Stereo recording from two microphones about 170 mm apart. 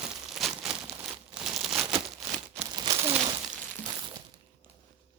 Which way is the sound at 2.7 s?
30° right (ahead or behind).